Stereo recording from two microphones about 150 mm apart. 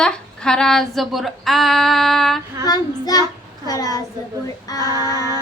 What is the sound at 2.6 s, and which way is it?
Child singing, 25° left (ahead or behind).